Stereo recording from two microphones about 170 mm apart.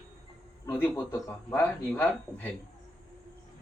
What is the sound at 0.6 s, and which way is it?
Speech, 15° left (ahead or behind).